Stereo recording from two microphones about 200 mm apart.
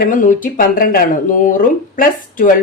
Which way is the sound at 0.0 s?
40° left (ahead or behind).